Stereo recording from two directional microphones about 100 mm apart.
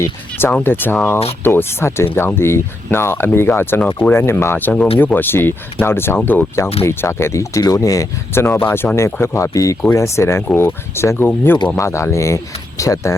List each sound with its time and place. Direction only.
0.0 s speech: 20° left (ahead or behind)